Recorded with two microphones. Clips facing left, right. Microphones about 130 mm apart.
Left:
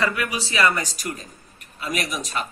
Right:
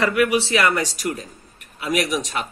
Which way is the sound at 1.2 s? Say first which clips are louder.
Right 5 dB; 75° right (ahead or behind).